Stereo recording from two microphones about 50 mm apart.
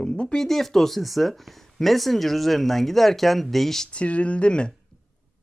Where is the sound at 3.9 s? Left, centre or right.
Left.